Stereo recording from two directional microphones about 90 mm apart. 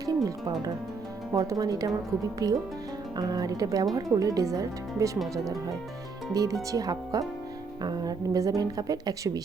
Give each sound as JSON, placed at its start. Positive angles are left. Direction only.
{"t": 0.0, "sound": "music", "side_deg": -40}
{"t": 1.3, "sound": "speech", "side_deg": -40}